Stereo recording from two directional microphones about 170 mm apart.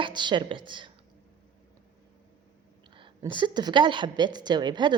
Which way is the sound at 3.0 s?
30° right (ahead or behind).